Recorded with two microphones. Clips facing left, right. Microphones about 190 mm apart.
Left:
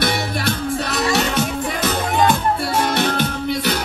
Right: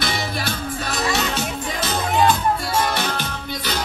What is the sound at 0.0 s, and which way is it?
Music, 60° left (ahead or behind).